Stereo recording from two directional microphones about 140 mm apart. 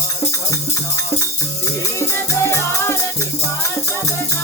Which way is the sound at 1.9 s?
20° left (ahead or behind).